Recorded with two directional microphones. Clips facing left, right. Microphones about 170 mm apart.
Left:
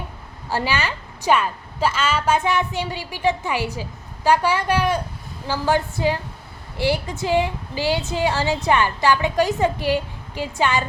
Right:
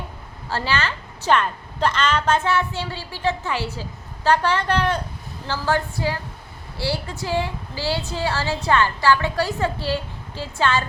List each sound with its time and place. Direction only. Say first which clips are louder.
0.5 s a woman's voice: left 1 dB; 15° left (ahead or behind)